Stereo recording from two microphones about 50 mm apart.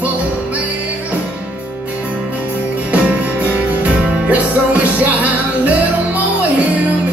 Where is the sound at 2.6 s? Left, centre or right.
Right.